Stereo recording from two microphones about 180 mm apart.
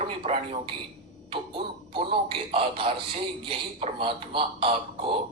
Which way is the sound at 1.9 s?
30° right (ahead or behind).